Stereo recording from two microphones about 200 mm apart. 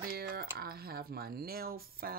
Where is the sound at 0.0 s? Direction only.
50° right (ahead or behind).